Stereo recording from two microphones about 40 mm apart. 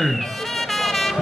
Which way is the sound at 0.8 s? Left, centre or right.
Centre.